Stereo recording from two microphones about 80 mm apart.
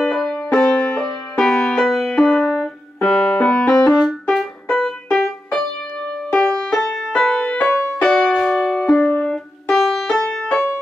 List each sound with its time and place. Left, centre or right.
0.0 s music: centre
2.5 s keyboard: centre
3.3 s music: centre
9.3 s music: centre